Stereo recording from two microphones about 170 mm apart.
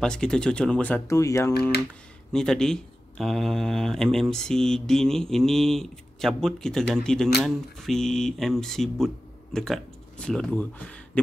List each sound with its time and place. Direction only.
0.0 s speech: 5° left (ahead or behind)
2.3 s speech: 5° left (ahead or behind)